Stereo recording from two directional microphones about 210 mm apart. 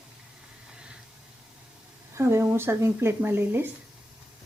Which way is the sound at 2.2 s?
15° right (ahead or behind).